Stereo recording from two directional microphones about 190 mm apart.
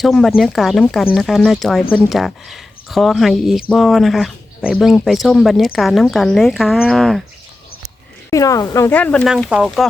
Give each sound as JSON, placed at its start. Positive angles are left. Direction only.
{"t": 0.0, "sound": "speech", "side_deg": 0}
{"t": 8.3, "sound": "speech", "side_deg": 15}
{"t": 9.2, "sound": "speech", "side_deg": -5}